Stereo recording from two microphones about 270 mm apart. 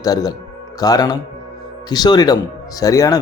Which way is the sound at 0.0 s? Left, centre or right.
Centre.